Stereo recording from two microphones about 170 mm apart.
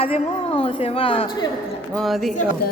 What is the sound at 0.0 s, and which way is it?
A woman's voice, 35° left (ahead or behind).